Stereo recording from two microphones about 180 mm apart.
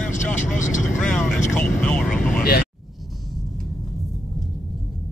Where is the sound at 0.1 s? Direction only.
45° left (ahead or behind).